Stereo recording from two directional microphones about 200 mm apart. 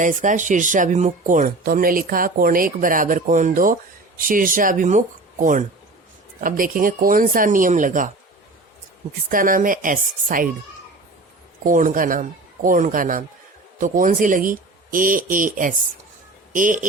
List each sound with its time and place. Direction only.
0.0 s speech: 40° right (ahead or behind)
9.3 s speech: 45° right (ahead or behind)
11.6 s a man's voice: 40° right (ahead or behind)